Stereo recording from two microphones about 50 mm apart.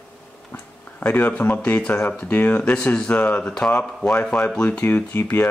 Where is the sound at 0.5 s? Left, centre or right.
Left.